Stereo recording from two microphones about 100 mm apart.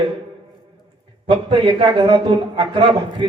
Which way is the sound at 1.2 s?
65° right (ahead or behind).